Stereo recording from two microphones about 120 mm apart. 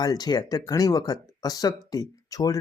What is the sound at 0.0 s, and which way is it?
Speech, 35° left (ahead or behind).